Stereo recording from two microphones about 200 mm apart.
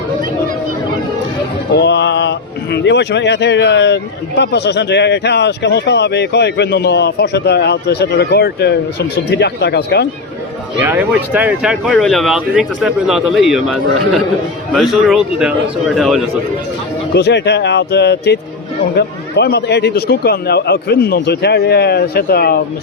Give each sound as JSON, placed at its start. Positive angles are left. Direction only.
{"t": 1.7, "sound": "mantra", "side_deg": 60}
{"t": 2.7, "sound": "a man's voice", "side_deg": 60}
{"t": 10.8, "sound": "speech", "side_deg": -10}
{"t": 17.2, "sound": "a man's voice", "side_deg": 55}